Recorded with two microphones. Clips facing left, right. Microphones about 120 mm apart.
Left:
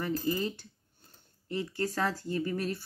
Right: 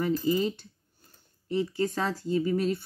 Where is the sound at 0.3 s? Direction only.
20° right (ahead or behind).